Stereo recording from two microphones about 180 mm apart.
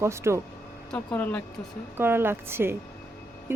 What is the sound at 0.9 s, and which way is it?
Speech, 10° left (ahead or behind).